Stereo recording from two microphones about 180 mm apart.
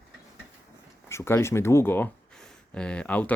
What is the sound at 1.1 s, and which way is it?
Speech, 15° left (ahead or behind).